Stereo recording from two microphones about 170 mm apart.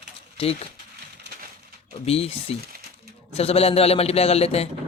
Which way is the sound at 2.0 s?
35° left (ahead or behind).